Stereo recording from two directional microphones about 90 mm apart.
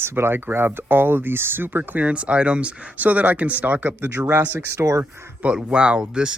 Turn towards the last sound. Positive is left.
turn(degrees=-10)  # may be behind; listen again after turning